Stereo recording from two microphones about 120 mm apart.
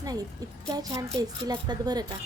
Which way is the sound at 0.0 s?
30° right (ahead or behind).